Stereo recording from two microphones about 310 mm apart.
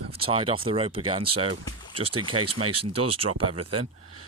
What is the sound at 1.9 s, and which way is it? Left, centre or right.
Speech, right.